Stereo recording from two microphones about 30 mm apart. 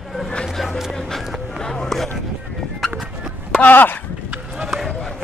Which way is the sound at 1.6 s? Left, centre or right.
Left.